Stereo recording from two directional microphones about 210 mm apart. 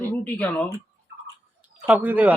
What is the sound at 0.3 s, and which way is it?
Speech, 5° left (ahead or behind).